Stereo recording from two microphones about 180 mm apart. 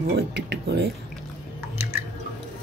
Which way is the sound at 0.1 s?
70° right (ahead or behind).